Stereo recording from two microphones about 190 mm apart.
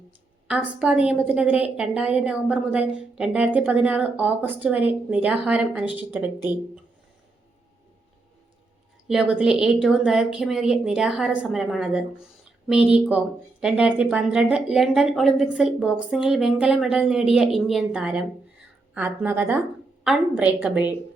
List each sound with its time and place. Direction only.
0.4 s a woman's voice: 5° right (ahead or behind)
9.0 s a woman's voice: 5° right (ahead or behind)